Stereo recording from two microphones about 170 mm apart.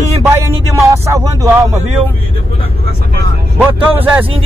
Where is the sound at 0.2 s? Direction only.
15° right (ahead or behind).